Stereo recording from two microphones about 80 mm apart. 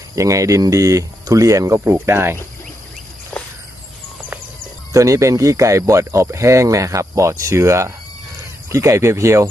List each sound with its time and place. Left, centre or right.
0.2 s speech: right
1.9 s speech: right
3.3 s cricket: centre
4.9 s speech: right